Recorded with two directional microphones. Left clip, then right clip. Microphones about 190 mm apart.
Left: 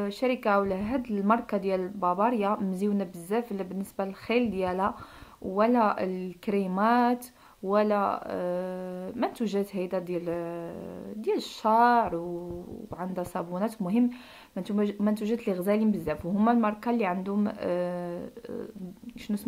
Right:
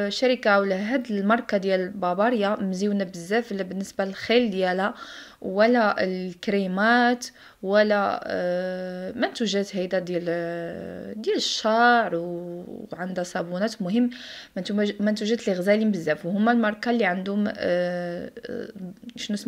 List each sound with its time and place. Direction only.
0.0 s speech: 15° right (ahead or behind)